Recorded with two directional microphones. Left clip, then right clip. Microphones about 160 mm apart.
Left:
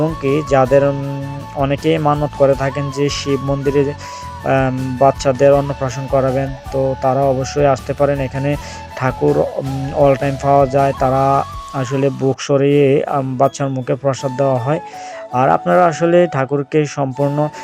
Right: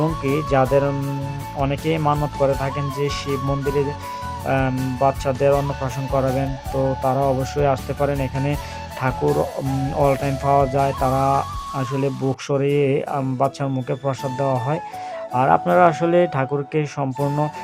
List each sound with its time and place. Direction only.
0.2 s fowl: 20° left (ahead or behind)
4.4 s speech: 25° left (ahead or behind)
9.0 s fowl: 20° left (ahead or behind)